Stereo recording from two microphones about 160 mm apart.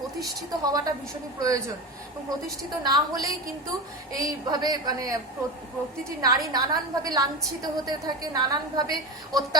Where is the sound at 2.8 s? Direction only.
25° right (ahead or behind).